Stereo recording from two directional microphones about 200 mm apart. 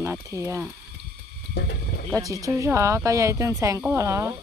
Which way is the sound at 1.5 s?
55° left (ahead or behind).